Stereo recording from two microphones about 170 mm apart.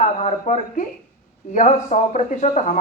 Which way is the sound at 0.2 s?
45° left (ahead or behind).